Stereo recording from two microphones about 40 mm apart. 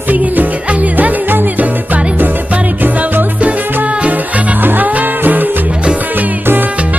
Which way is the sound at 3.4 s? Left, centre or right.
Right.